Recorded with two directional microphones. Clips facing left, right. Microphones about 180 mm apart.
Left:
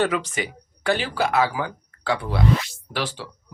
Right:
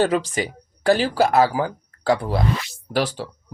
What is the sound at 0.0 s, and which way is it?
A man's voice, 30° right (ahead or behind).